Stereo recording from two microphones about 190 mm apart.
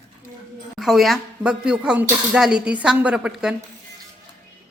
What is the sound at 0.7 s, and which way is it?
Speech, centre (ahead or behind).